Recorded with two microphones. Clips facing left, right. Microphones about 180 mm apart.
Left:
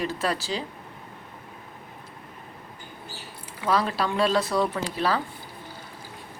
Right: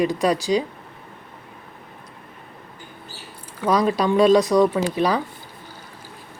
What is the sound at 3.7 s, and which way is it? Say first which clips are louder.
Speech: right 6 dB; 15° right (ahead or behind).